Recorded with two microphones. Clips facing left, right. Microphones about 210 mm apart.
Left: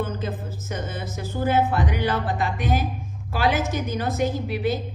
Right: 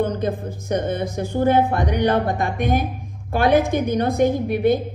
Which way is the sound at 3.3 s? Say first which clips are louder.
Right 6 dB; 55° right (ahead or behind).